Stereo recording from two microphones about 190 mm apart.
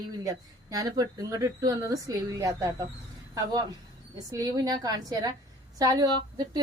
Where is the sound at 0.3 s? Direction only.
20° right (ahead or behind).